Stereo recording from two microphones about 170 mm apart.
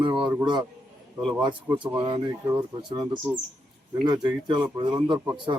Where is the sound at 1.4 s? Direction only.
30° right (ahead or behind).